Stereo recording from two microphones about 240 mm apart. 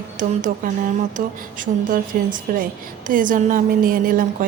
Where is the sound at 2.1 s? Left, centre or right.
Right.